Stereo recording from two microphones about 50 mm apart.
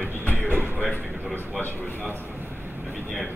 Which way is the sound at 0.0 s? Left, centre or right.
Left.